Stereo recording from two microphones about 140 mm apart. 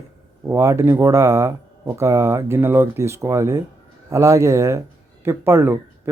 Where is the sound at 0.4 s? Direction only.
20° right (ahead or behind).